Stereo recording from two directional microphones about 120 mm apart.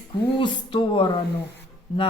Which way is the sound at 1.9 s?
55° left (ahead or behind).